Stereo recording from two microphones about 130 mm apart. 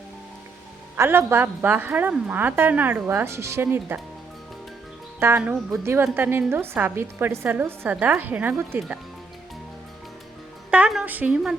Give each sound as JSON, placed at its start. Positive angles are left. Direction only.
{"t": 0.9, "sound": "a woman's voice", "side_deg": -20}
{"t": 5.4, "sound": "speech", "side_deg": -5}
{"t": 5.8, "sound": "a woman's voice", "side_deg": -20}
{"t": 10.7, "sound": "a woman's voice", "side_deg": -10}